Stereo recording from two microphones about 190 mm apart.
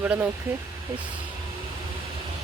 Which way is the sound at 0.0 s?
10° right (ahead or behind).